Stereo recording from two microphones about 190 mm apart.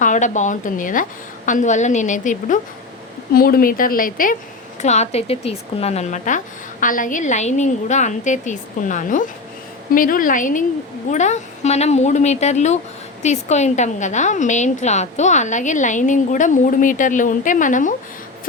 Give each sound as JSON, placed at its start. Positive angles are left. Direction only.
{"t": 0.0, "sound": "a woman's voice", "side_deg": 40}